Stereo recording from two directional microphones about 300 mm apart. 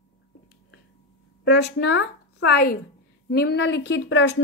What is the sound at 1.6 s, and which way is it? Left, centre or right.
Speech, left.